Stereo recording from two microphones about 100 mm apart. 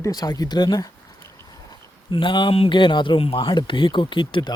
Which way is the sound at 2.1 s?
55° left (ahead or behind).